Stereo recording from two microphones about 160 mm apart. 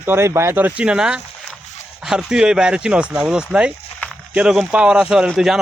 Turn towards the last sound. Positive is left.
turn(degrees=-5)  # may be behind; listen again after turning